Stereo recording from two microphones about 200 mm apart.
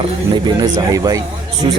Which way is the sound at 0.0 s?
20° right (ahead or behind).